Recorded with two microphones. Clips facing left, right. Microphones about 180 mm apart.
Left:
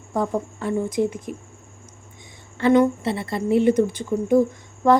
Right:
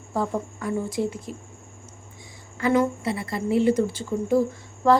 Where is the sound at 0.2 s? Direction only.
20° left (ahead or behind).